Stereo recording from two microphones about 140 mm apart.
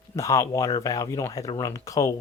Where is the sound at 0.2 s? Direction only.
20° left (ahead or behind).